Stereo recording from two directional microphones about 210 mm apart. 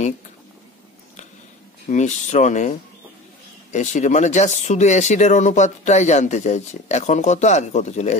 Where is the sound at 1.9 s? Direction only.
35° left (ahead or behind).